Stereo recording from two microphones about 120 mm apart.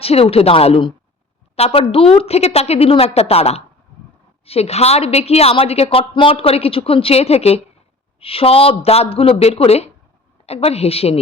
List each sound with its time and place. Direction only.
0.0 s a woman's voice: 55° left (ahead or behind)